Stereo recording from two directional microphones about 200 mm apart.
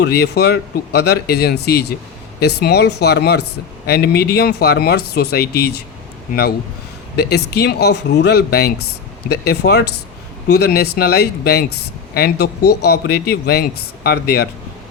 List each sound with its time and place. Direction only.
0.0 s a man's voice: 55° left (ahead or behind)
7.2 s a man's voice: 55° left (ahead or behind)